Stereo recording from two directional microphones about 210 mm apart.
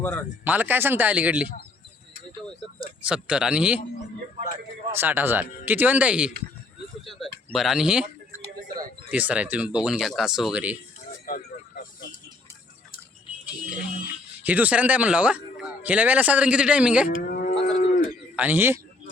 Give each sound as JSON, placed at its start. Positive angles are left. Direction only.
{"t": 0.0, "sound": "speech", "side_deg": 10}
{"t": 0.4, "sound": "speech", "side_deg": -10}
{"t": 3.0, "sound": "speech", "side_deg": -5}
{"t": 4.9, "sound": "speech", "side_deg": -10}
{"t": 9.0, "sound": "speech", "side_deg": -5}
{"t": 11.3, "sound": "a sound", "side_deg": 45}
{"t": 14.4, "sound": "speech", "side_deg": -5}
{"t": 17.2, "sound": "livestock", "side_deg": 45}
{"t": 18.3, "sound": "speech", "side_deg": -10}